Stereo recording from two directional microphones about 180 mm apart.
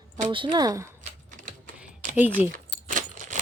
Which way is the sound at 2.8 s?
45° right (ahead or behind).